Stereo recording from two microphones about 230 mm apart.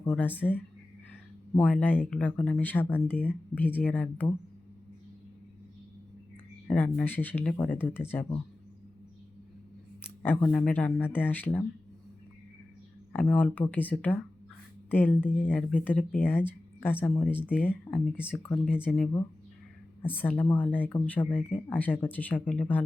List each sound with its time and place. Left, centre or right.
0.0 s speech: centre
6.7 s speech: centre
10.2 s speech: centre
13.1 s speech: centre